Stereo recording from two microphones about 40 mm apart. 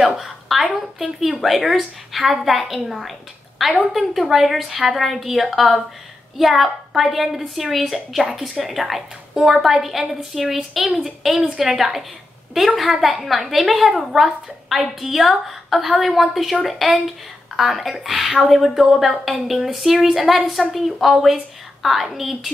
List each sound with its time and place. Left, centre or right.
0.0 s a woman's voice: centre